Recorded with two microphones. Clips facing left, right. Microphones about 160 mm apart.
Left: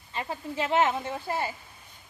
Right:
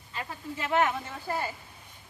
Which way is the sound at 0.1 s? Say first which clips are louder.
Left 4 dB; 25° left (ahead or behind).